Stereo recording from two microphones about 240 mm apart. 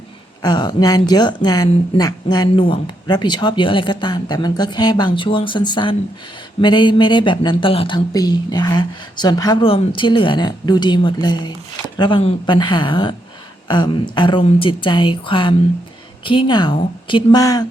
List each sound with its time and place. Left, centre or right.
0.4 s a woman's voice: centre